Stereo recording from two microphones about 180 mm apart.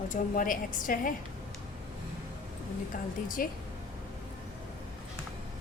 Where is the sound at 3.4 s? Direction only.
50° left (ahead or behind).